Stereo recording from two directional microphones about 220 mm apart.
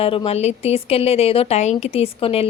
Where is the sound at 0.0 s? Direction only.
25° left (ahead or behind).